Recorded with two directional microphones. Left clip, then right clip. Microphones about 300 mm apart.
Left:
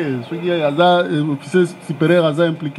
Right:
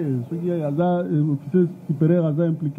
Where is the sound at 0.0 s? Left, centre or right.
Centre.